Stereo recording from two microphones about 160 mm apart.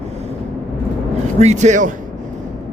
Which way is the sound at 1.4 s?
45° right (ahead or behind).